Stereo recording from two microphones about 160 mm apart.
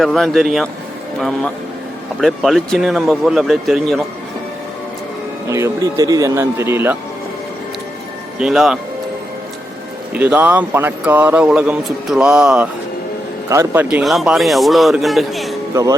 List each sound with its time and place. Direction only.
0.0 s a man's voice: centre (ahead or behind)
2.2 s a man's voice: centre (ahead or behind)
5.5 s a man's voice: 20° right (ahead or behind)
8.4 s a man's voice: 5° right (ahead or behind)
10.2 s a man's voice: 10° right (ahead or behind)
13.5 s a man's voice: 15° right (ahead or behind)
13.8 s a man's voice: 5° right (ahead or behind)
15.7 s speech: 20° right (ahead or behind)